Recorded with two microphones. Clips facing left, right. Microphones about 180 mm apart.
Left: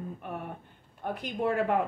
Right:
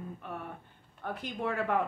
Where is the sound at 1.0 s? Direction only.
20° left (ahead or behind).